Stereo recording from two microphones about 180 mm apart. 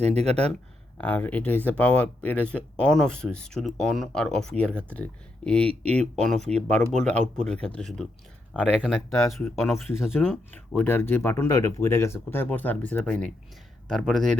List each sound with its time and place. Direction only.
0.0 s speech: 35° right (ahead or behind)
0.9 s speech: 10° left (ahead or behind)
10.1 s speech: 10° left (ahead or behind)